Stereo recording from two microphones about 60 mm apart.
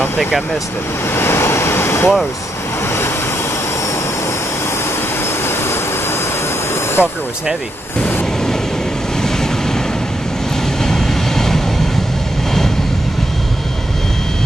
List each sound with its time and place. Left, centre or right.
1.1 s a sound: left
7.0 s speech: centre
10.8 s vehicle: centre